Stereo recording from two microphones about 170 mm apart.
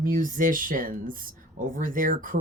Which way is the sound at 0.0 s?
55° right (ahead or behind).